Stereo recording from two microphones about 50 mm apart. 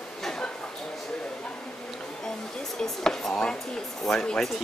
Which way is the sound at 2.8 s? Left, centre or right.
Centre.